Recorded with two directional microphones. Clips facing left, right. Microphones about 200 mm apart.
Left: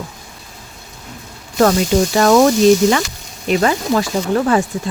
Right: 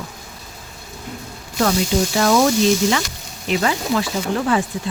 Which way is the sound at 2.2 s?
55° left (ahead or behind).